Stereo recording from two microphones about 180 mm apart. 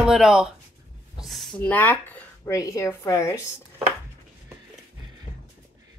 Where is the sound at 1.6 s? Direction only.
10° left (ahead or behind).